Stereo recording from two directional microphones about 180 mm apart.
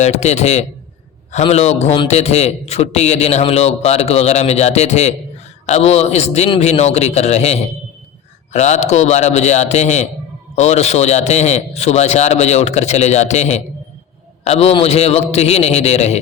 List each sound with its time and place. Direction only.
0.0 s a man's voice: 35° left (ahead or behind)